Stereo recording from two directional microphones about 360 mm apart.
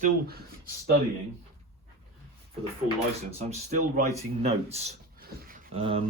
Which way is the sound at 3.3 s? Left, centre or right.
Centre.